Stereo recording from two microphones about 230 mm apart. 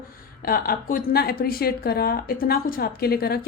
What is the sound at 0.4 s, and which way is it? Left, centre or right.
Speech, left.